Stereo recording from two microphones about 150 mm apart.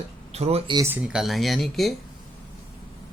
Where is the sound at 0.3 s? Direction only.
45° right (ahead or behind).